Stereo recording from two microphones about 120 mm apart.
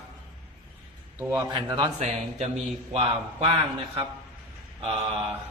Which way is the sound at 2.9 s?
55° right (ahead or behind).